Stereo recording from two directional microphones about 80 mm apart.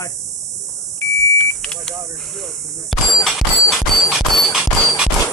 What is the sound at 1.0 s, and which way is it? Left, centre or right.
Beep, left.